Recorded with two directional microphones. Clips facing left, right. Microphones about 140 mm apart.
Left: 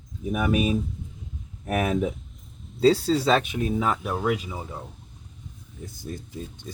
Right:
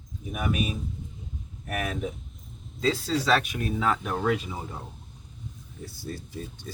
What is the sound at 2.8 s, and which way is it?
Speech, 25° left (ahead or behind).